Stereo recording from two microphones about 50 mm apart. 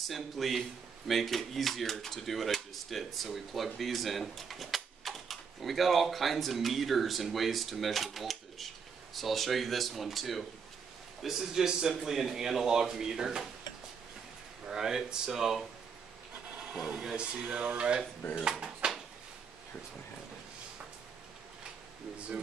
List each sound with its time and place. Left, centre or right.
0.1 s speech: centre
14.7 s speech: centre
16.5 s wood: right
17.0 s speech: centre